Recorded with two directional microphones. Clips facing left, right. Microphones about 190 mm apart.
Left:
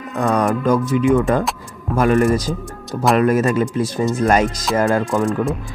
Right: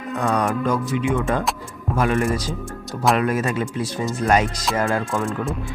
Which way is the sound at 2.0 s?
40° left (ahead or behind).